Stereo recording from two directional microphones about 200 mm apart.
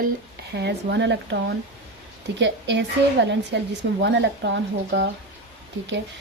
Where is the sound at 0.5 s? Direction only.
60° right (ahead or behind).